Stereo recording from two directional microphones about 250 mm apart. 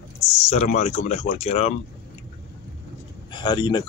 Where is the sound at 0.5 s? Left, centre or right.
Left.